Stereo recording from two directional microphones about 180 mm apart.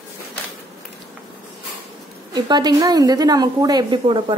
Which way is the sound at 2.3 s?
25° right (ahead or behind).